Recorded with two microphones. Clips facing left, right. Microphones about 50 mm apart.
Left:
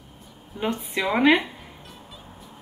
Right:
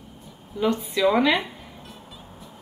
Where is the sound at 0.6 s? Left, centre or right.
Left.